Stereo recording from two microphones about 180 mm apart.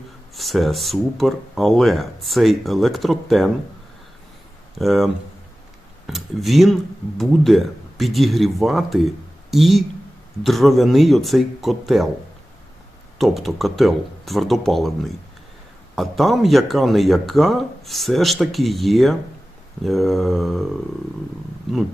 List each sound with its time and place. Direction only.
0.3 s speech: centre (ahead or behind)
4.8 s speech: centre (ahead or behind)
13.1 s speech: centre (ahead or behind)